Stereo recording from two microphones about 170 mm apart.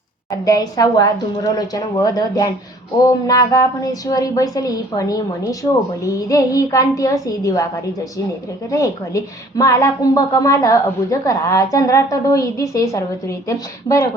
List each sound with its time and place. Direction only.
0.3 s a woman's voice: 20° left (ahead or behind)